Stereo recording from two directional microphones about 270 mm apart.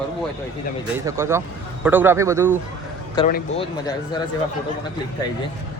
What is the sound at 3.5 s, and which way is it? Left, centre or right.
Speech, centre.